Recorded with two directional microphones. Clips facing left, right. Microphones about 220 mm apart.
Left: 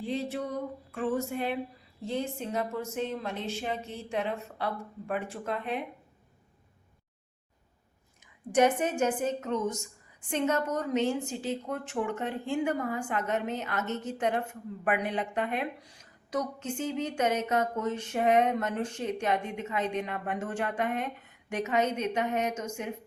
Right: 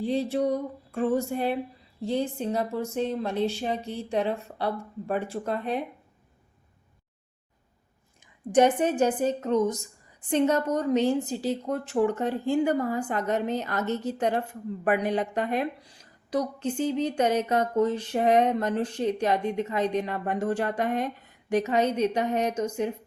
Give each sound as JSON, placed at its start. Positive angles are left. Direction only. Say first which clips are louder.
{"t": 0.0, "sound": "a woman's voice", "louder": "right 7 dB", "side_deg": -35}
{"t": 8.2, "sound": "a woman's voice", "louder": "right 4 dB", "side_deg": -30}